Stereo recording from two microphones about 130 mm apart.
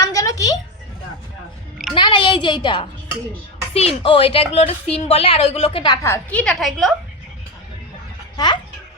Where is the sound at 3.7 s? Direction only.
50° left (ahead or behind).